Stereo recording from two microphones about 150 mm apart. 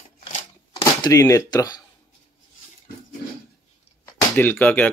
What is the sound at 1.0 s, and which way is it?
Speech, 20° left (ahead or behind).